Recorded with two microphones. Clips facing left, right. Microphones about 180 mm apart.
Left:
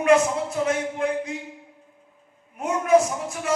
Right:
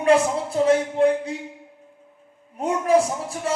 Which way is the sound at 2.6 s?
30° right (ahead or behind).